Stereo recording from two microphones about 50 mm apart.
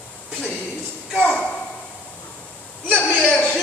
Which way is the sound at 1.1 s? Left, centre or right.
Left.